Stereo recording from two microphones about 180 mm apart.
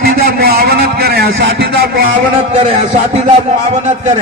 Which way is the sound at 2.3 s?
35° right (ahead or behind).